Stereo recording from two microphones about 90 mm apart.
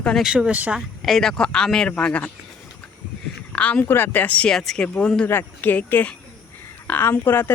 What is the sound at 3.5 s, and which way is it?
Speech, 15° left (ahead or behind).